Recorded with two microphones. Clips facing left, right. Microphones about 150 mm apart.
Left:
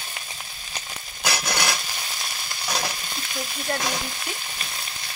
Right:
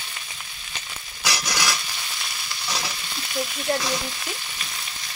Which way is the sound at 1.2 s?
55° left (ahead or behind).